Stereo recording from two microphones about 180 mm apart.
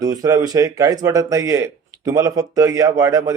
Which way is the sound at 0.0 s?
20° right (ahead or behind).